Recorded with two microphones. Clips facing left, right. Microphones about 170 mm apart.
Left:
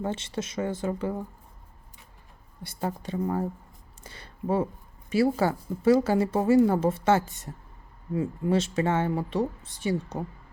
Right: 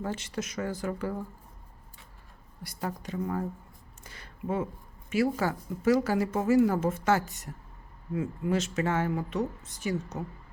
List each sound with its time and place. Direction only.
0.0 s speech: 25° left (ahead or behind)
2.6 s speech: 30° left (ahead or behind)